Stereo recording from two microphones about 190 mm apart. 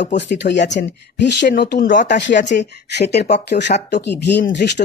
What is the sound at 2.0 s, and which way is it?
Speech, 65° left (ahead or behind).